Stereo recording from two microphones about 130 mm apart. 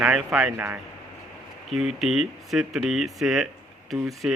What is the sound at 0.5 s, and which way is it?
Speech, 15° right (ahead or behind).